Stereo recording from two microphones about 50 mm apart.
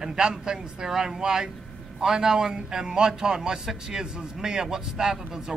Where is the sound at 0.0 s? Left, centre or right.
Centre.